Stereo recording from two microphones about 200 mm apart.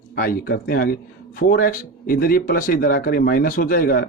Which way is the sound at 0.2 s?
50° left (ahead or behind).